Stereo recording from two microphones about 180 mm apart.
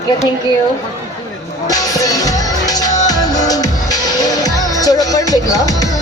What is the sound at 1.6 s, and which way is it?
Music, 20° left (ahead or behind).